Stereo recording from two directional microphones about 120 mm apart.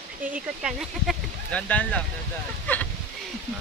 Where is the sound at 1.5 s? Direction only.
10° left (ahead or behind).